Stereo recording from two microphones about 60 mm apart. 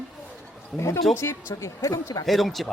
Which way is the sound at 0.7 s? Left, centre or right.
Left.